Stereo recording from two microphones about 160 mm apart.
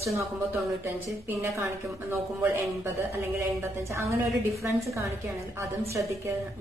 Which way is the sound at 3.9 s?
20° right (ahead or behind).